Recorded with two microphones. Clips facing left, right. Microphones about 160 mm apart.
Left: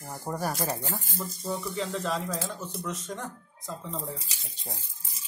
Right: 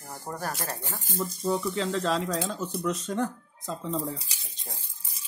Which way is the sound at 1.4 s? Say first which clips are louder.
Right 5 dB; 90° right.